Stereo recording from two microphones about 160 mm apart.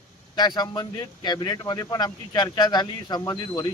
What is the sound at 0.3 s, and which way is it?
Speech, 25° left (ahead or behind).